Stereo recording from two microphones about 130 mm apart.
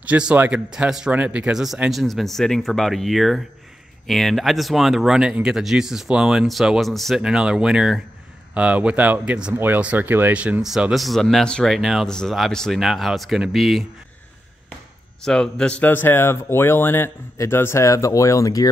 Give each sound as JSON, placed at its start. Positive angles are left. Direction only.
{"t": 0.0, "sound": "speech", "side_deg": -10}
{"t": 15.2, "sound": "speech", "side_deg": 5}